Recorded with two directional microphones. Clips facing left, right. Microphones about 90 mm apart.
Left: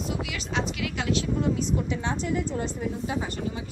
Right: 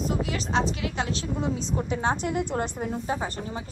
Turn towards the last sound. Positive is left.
turn(degrees=-35)  # may be behind; listen again after turning